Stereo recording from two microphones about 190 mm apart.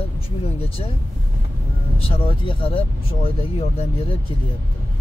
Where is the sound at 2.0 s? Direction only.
30° left (ahead or behind).